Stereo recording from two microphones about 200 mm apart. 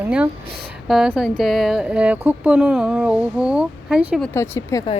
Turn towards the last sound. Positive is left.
turn(degrees=15)  # may be behind; listen again after turning